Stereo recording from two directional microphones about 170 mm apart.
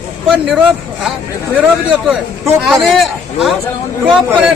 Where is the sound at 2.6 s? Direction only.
Centre (ahead or behind).